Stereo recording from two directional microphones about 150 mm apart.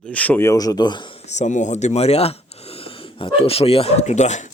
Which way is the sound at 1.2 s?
50° left (ahead or behind).